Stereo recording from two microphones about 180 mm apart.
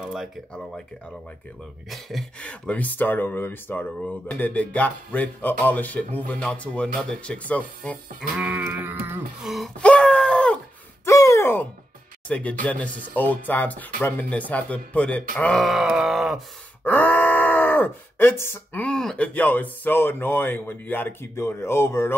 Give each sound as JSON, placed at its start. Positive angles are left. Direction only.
{"t": 0.0, "sound": "groan", "side_deg": 0}
{"t": 1.9, "sound": "speech", "side_deg": 0}
{"t": 8.2, "sound": "sheep", "side_deg": -5}
{"t": 9.5, "sound": "a sound", "side_deg": 5}
{"t": 11.1, "sound": "a sound", "side_deg": 15}
{"t": 12.3, "sound": "speech", "side_deg": 5}
{"t": 15.3, "sound": "groan", "side_deg": 5}
{"t": 16.8, "sound": "speech", "side_deg": 10}